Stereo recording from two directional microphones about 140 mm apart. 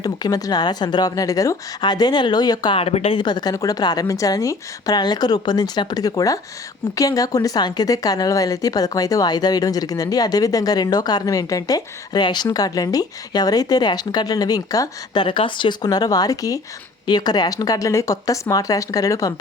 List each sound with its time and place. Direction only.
0.0 s speech: 25° left (ahead or behind)
2.7 s speech: 45° left (ahead or behind); by 19.3 s 25° left (ahead or behind)